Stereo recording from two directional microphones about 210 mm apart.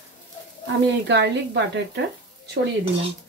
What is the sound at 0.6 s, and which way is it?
Speech, 55° right (ahead or behind).